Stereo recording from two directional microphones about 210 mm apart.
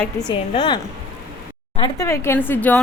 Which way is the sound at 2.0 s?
10° left (ahead or behind).